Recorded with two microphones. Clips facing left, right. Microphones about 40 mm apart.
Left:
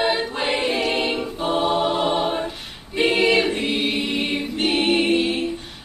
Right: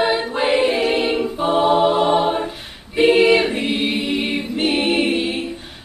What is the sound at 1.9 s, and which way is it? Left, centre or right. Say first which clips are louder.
Music: right 5 dB; centre.